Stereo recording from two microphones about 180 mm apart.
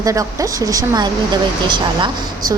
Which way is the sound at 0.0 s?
20° right (ahead or behind).